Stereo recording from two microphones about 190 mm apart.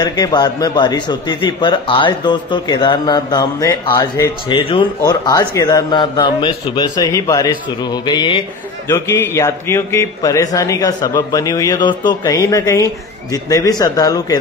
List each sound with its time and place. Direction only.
0.0 s a man's voice: 20° left (ahead or behind)